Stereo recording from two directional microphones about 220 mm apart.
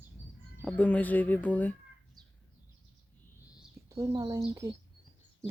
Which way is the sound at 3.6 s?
10° right (ahead or behind).